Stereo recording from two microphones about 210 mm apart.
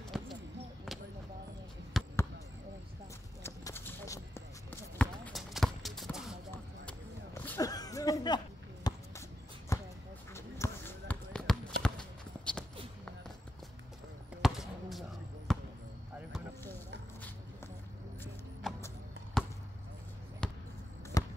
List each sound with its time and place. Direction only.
0.1 s a sound: centre (ahead or behind)
2.0 s basketball bounce: centre (ahead or behind)
3.4 s basketball bounce: 10° left (ahead or behind)
6.5 s a sound: 10° left (ahead or behind)
8.8 s shuffle: 20° left (ahead or behind)
9.7 s basketball bounce: 15° left (ahead or behind)
11.8 s clip-clop: 5° left (ahead or behind)
14.4 s basketball bounce: centre (ahead or behind)
18.2 s music: 10° left (ahead or behind)
20.4 s basketball bounce: 5° left (ahead or behind)
21.2 s basketball bounce: 15° left (ahead or behind)